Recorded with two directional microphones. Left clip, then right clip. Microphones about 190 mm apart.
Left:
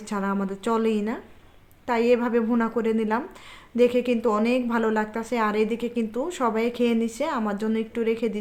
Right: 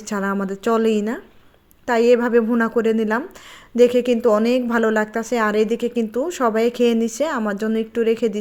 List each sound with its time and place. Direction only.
0.0 s a woman's voice: 30° right (ahead or behind)